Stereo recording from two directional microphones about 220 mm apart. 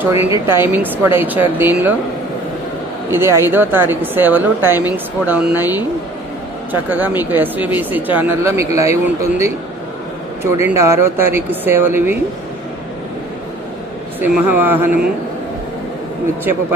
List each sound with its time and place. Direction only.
0.0 s speech: 10° right (ahead or behind)
3.1 s speech: 10° right (ahead or behind)
14.3 s speech: 10° right (ahead or behind)